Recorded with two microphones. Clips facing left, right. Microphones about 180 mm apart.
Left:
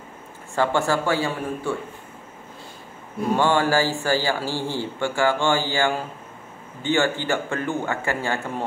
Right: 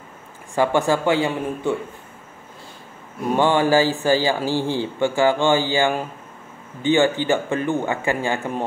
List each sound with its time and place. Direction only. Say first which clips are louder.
0.6 s a man's voice: right 3 dB; 15° right (ahead or behind)
3.3 s speech: right 4 dB; 15° right (ahead or behind)